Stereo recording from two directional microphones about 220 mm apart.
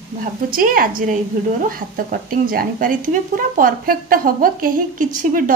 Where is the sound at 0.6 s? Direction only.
40° right (ahead or behind).